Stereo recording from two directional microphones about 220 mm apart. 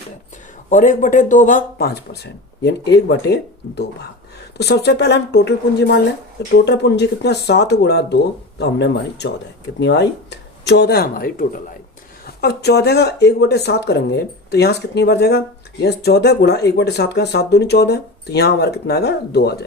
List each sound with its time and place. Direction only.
0.7 s speech: 35° left (ahead or behind)